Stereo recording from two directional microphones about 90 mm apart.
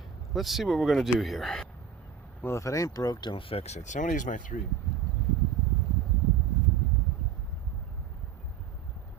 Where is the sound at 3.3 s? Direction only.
90° left.